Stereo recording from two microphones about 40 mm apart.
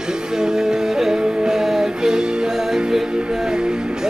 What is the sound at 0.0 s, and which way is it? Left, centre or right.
Music, centre.